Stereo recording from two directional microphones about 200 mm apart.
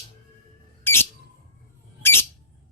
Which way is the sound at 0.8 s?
10° left (ahead or behind).